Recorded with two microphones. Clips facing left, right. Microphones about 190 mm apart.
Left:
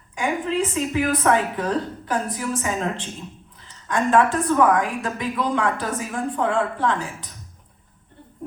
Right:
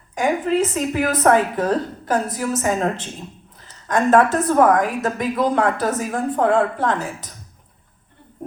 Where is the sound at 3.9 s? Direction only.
40° right (ahead or behind).